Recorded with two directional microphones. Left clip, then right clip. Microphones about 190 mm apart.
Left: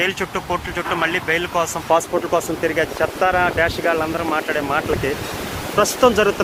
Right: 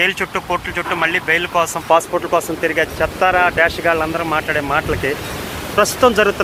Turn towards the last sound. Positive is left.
turn(degrees=10)  # may be behind; listen again after turning